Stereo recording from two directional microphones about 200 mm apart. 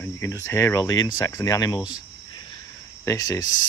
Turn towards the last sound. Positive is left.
turn(degrees=15)  # may be behind; listen again after turning